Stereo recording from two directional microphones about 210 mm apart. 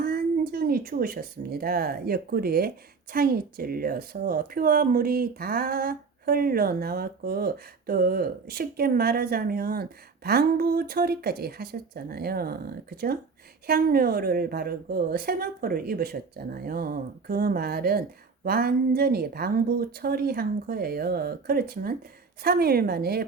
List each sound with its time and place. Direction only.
0.0 s speech: 45° right (ahead or behind)